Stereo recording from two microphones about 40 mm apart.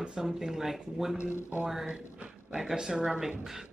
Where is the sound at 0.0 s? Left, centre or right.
Centre.